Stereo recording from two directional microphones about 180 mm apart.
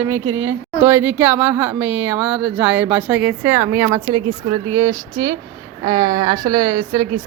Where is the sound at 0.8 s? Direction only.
15° right (ahead or behind).